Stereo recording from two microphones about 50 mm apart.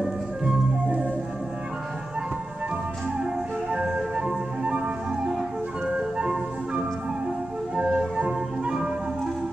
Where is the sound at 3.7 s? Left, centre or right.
Centre.